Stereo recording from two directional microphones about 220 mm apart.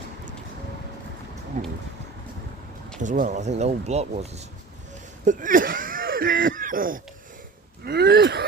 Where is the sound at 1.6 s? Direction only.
30° right (ahead or behind).